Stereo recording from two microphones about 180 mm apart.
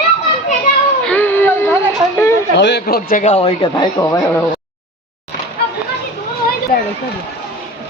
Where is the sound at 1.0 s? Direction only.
10° left (ahead or behind).